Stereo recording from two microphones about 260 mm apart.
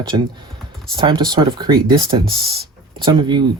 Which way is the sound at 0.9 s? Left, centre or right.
Centre.